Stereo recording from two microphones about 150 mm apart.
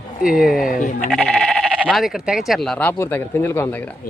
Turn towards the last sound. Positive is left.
turn(degrees=15)  # may be behind; listen again after turning